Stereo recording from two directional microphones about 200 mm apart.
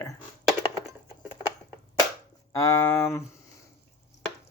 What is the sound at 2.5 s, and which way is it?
Chopping, 15° left (ahead or behind).